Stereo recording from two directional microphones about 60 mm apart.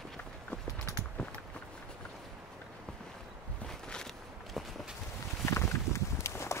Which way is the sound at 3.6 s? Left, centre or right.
Centre.